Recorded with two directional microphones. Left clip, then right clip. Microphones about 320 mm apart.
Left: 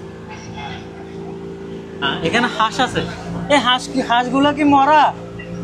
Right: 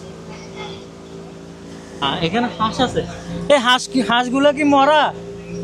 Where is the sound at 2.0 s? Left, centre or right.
Right.